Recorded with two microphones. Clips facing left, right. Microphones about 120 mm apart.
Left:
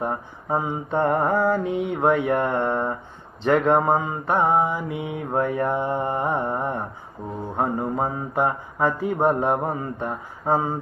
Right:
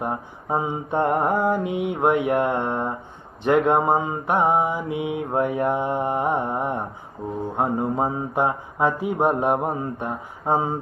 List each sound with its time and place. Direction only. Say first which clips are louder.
0.0 s mantra: even; 10° right (ahead or behind)